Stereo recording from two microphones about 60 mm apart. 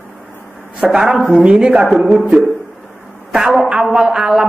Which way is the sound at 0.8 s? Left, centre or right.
Centre.